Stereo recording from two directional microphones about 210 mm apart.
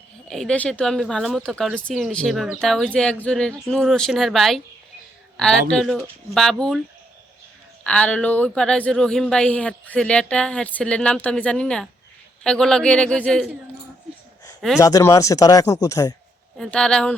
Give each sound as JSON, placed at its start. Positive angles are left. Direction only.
{"t": 0.3, "sound": "speech", "side_deg": 0}
{"t": 7.9, "sound": "speech", "side_deg": 5}
{"t": 14.8, "sound": "speech", "side_deg": 15}
{"t": 16.6, "sound": "speech", "side_deg": 5}